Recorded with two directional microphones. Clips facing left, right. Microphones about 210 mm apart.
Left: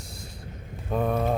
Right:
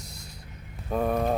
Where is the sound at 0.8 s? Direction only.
Centre (ahead or behind).